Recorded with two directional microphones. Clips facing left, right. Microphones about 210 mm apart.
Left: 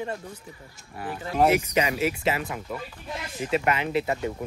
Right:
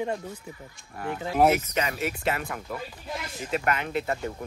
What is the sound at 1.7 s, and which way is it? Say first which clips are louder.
Speech: left 4 dB; 10° left (ahead or behind).